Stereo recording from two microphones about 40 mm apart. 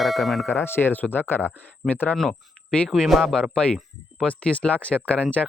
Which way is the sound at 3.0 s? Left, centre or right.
Centre.